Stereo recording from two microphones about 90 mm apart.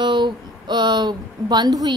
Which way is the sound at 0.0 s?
60° right (ahead or behind).